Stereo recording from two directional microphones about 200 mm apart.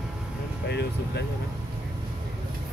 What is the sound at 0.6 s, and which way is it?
Air conditioning, 55° left (ahead or behind).